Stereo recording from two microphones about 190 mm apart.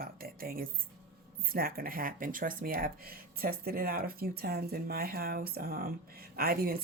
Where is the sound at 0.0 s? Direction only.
50° right (ahead or behind).